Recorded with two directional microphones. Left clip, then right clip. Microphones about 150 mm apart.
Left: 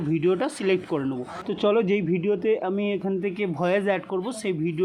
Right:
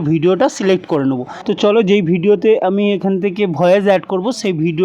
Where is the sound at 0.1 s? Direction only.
35° right (ahead or behind).